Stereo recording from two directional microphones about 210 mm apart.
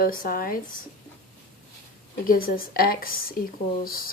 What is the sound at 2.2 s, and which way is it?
Speech, 40° left (ahead or behind).